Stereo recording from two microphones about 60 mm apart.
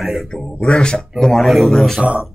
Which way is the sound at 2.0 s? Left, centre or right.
Right.